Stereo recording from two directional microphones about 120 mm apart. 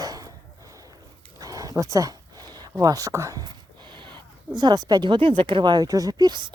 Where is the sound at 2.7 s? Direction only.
30° right (ahead or behind).